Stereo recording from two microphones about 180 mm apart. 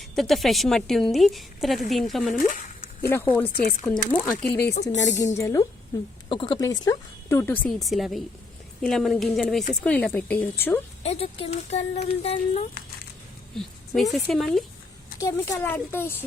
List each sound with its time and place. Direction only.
0.2 s a woman's voice: centre (ahead or behind)
2.5 s a sound: 50° left (ahead or behind)
3.5 s speech: 55° left (ahead or behind)
4.2 s speech: 10° left (ahead or behind)
4.7 s speech: 40° left (ahead or behind)
5.1 s speech: 15° left (ahead or behind)
6.2 s a woman's voice: 30° left (ahead or behind); by 10.8 s 10° left (ahead or behind)
11.0 s speech: 35° left (ahead or behind)
13.6 s a woman's voice: centre (ahead or behind)
15.2 s speech: 15° left (ahead or behind)